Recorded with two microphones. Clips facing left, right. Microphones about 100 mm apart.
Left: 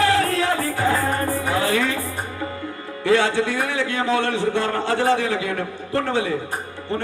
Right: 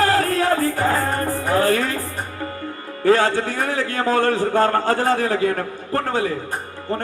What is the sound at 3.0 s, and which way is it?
A man's voice, 45° right (ahead or behind).